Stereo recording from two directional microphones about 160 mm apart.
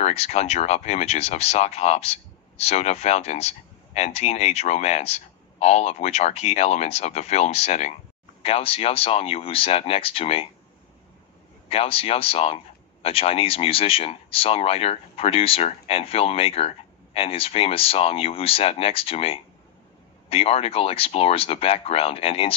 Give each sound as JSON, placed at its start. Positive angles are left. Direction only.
{"t": 0.0, "sound": "speech", "side_deg": 40}
{"t": 11.7, "sound": "speech", "side_deg": 35}